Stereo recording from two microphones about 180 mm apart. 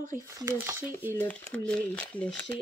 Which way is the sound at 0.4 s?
15° right (ahead or behind).